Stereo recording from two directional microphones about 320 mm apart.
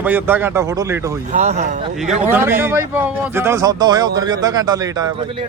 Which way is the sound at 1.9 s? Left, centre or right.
Centre.